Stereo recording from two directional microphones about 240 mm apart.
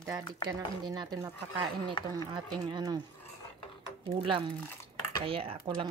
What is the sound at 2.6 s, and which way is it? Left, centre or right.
Speech, centre.